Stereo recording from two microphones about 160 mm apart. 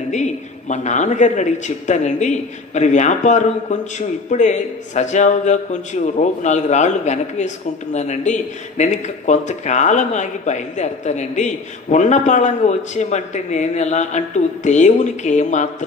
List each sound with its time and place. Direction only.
0.1 s a man's voice: 50° left (ahead or behind)